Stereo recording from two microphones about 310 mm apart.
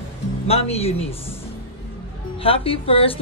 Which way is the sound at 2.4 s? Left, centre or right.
Centre.